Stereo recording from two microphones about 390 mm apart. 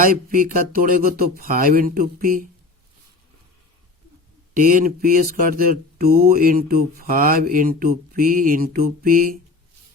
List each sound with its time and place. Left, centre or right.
0.0 s speech: right
4.5 s speech: right